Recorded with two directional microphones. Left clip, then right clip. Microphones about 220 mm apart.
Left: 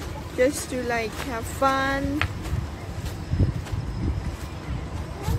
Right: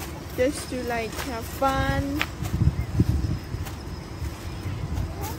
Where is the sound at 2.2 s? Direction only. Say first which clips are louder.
Even; 20° right (ahead or behind).